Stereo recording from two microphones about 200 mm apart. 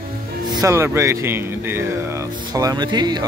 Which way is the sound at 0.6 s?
15° right (ahead or behind).